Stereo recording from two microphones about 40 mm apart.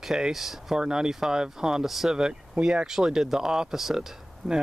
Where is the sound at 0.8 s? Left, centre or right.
Centre.